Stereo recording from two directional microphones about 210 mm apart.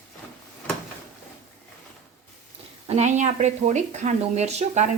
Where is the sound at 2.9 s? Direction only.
35° right (ahead or behind).